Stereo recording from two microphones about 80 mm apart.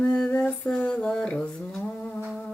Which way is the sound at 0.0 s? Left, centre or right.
Centre.